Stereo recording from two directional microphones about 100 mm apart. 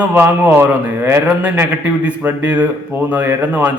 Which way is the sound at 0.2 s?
20° right (ahead or behind).